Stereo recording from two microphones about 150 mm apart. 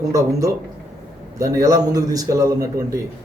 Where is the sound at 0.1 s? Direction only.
20° right (ahead or behind).